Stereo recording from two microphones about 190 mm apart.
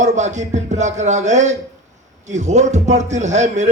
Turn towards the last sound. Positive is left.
turn(degrees=-40)  # may be behind; listen again after turning